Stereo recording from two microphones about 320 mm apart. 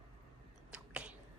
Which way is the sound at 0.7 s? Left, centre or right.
Centre.